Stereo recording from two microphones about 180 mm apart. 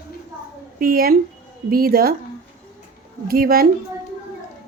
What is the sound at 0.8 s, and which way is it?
A woman's voice, 55° right (ahead or behind).